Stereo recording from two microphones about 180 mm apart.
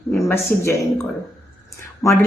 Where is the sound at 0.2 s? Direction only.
15° left (ahead or behind).